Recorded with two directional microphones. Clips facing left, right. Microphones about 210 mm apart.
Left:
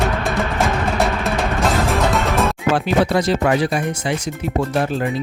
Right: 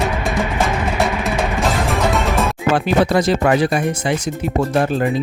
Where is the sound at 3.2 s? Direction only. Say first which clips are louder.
Right 2 dB; 55° right (ahead or behind).